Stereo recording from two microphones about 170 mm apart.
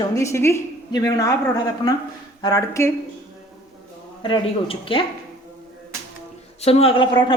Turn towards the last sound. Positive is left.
turn(degrees=30)  # may be behind; listen again after turning